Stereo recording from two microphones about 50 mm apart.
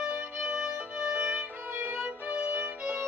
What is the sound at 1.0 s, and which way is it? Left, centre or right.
Music, centre.